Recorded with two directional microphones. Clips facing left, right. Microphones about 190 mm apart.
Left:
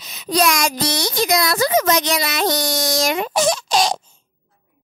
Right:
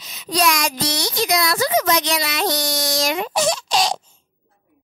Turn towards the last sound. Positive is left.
turn(degrees=50)  # may be behind; listen again after turning